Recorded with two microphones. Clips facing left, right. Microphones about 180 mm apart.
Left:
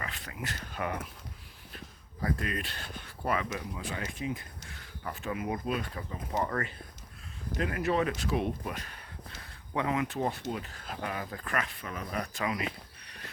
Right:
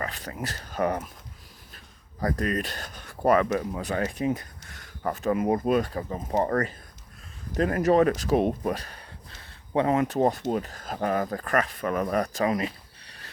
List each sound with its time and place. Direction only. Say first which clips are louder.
0.0 s speech: right 7 dB; 40° right (ahead or behind)
2.2 s speech: right 6 dB; 40° right (ahead or behind)
11.8 s speech: right 11 dB; 55° right (ahead or behind); by 13.2 s 35° right (ahead or behind)